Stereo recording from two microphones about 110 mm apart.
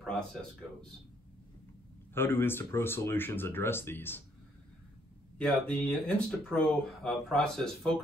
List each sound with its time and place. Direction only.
0.0 s a sound: 5° left (ahead or behind)
2.1 s speech: 20° left (ahead or behind)
5.4 s speech: 10° left (ahead or behind)